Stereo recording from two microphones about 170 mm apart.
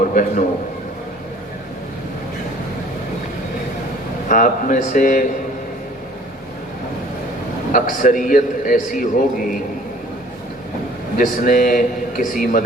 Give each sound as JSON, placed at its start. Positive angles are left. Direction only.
{"t": 0.1, "sound": "a man's voice", "side_deg": 50}
{"t": 4.3, "sound": "a man's voice", "side_deg": 50}
{"t": 7.7, "sound": "a man's voice", "side_deg": 50}
{"t": 11.2, "sound": "a man's voice", "side_deg": 50}